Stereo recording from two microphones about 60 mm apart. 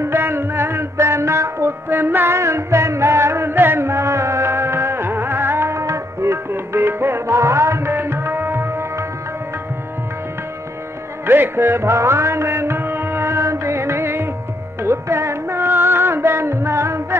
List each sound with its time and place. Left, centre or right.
0.0 s music: right
3.5 s music: right
11.2 s music: right